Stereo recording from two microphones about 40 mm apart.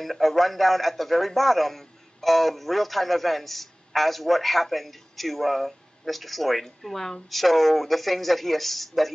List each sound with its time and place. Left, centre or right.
0.0 s a man's voice: centre